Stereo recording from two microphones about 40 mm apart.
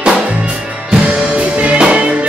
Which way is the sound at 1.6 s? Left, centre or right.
Right.